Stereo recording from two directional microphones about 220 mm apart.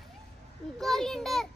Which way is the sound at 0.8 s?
Centre (ahead or behind).